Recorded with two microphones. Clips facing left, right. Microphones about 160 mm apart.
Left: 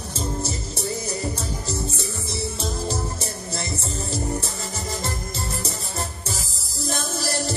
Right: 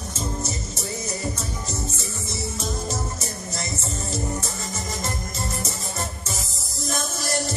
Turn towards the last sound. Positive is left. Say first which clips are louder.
# even
turn(degrees=30)  # may be behind; listen again after turning